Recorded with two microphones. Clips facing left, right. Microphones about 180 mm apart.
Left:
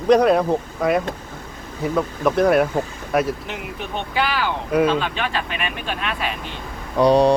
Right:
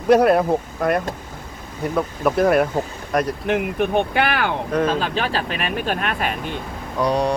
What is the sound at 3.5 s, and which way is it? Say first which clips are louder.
Speech: right 10 dB; 55° right (ahead or behind).